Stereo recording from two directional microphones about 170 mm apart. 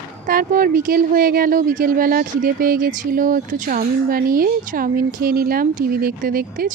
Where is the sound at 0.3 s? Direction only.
55° right (ahead or behind).